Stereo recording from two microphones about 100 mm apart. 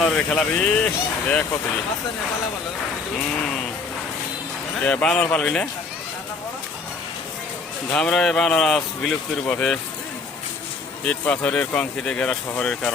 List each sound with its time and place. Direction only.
0.0 s speech: 10° left (ahead or behind)
4.8 s speech: 10° left (ahead or behind)
7.9 s speech: 5° left (ahead or behind)
11.0 s speech: 10° left (ahead or behind)